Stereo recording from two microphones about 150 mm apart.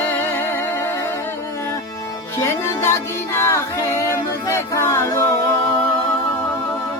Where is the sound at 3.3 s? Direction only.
20° left (ahead or behind).